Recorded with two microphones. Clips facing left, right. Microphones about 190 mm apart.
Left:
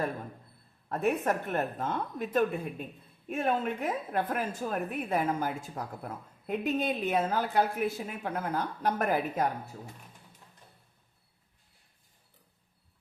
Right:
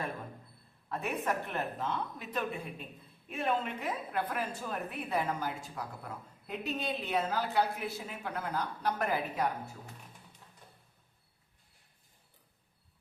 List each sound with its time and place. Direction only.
0.9 s a woman's voice: 45° left (ahead or behind)